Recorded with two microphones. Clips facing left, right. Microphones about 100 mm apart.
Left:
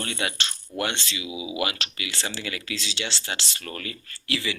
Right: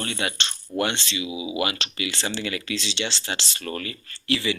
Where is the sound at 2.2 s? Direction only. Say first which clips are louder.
Right 3 dB; 20° right (ahead or behind).